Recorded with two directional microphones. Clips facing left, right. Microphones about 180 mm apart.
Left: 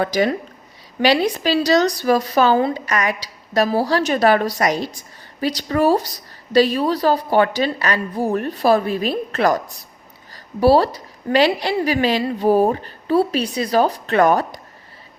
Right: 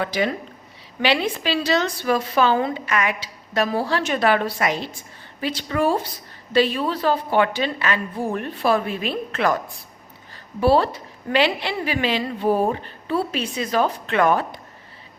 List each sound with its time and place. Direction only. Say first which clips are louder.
0.0 s a woman's voice: left 5 dB; 40° left (ahead or behind)